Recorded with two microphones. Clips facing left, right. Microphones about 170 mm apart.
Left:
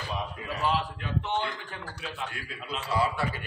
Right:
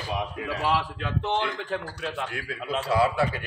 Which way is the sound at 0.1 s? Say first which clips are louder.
Right 5 dB; 90° right.